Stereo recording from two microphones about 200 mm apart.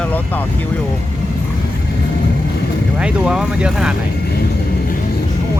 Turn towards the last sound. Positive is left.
turn(degrees=-5)  # may be behind; listen again after turning